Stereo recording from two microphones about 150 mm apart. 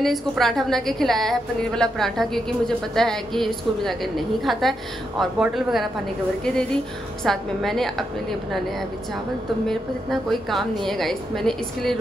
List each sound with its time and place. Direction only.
0.0 s a woman's voice: centre (ahead or behind)
10.3 s a woman's voice: centre (ahead or behind)